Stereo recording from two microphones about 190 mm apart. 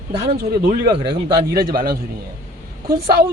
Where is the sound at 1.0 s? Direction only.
55° right (ahead or behind).